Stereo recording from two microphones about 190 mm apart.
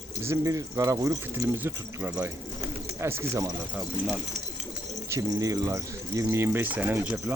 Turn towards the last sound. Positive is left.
turn(degrees=-5)  # may be behind; listen again after turning